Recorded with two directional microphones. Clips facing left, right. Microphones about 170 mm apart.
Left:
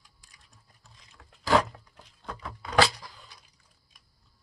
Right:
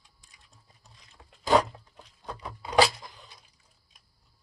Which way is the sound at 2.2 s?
20° right (ahead or behind).